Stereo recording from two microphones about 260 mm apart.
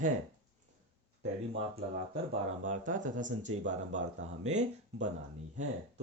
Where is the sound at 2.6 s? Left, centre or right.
Right.